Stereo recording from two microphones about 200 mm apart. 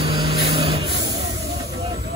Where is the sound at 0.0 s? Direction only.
25° right (ahead or behind).